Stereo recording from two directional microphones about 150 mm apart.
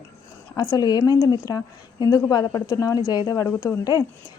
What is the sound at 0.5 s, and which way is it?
A woman's voice, 25° left (ahead or behind).